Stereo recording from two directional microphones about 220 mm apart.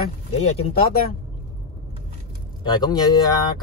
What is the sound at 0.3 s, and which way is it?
Speech, 25° left (ahead or behind).